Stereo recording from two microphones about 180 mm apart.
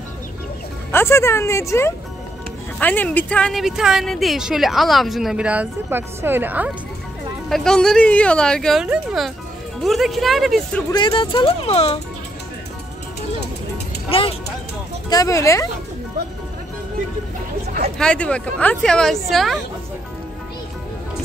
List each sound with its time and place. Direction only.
0.9 s a woman's voice: 15° left (ahead or behind); by 6.7 s 10° right (ahead or behind)
7.4 s a woman's voice: centre (ahead or behind)
10.9 s speech: 25° left (ahead or behind)
14.1 s a sound: 30° left (ahead or behind)
15.0 s speech: 20° left (ahead or behind)
17.9 s a woman's voice: 5° left (ahead or behind)